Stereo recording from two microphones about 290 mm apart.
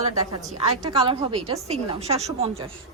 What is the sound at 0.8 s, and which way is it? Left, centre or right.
A woman's voice, centre.